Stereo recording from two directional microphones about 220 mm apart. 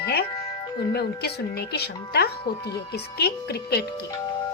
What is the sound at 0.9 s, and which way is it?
A woman's voice, 45° left (ahead or behind).